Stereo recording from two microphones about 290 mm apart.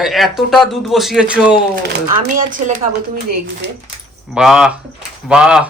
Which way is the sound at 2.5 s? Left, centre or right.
Right.